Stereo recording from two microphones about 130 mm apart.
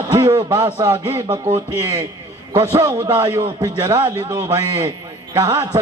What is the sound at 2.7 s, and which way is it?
A man's voice, 30° right (ahead or behind).